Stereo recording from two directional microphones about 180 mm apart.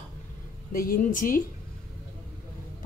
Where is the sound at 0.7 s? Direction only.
50° left (ahead or behind).